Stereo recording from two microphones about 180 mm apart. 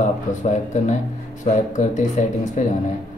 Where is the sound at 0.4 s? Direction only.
40° left (ahead or behind).